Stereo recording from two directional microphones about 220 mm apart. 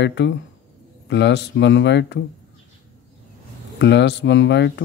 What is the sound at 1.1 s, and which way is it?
Speech, 50° left (ahead or behind).